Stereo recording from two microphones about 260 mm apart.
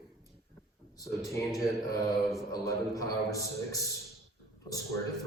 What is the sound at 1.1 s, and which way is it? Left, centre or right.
Speech, centre.